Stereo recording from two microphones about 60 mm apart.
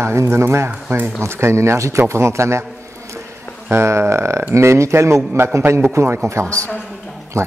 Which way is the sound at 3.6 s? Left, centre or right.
Right.